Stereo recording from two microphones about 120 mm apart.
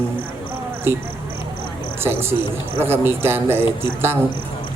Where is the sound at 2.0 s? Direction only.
20° right (ahead or behind).